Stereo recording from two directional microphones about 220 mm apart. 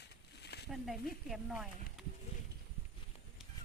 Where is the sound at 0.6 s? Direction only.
Centre (ahead or behind).